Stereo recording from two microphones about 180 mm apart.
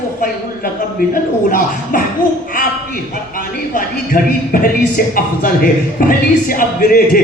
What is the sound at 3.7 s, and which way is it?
Speech, 50° left (ahead or behind).